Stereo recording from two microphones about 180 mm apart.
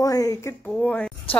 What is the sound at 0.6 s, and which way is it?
Speech, 10° left (ahead or behind).